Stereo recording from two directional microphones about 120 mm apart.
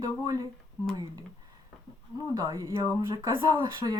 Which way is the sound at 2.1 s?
30° right (ahead or behind).